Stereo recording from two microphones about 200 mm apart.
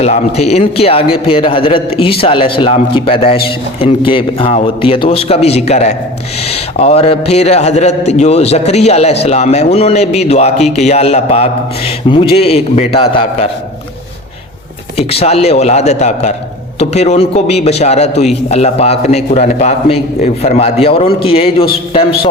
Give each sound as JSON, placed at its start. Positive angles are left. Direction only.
{"t": 0.0, "sound": "a man's voice", "side_deg": 30}
{"t": 14.9, "sound": "a man's voice", "side_deg": 30}